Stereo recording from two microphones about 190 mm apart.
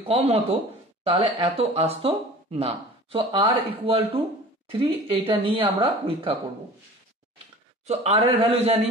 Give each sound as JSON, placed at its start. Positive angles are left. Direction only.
{"t": 0.0, "sound": "a man's voice", "side_deg": -30}
{"t": 7.8, "sound": "a man's voice", "side_deg": -35}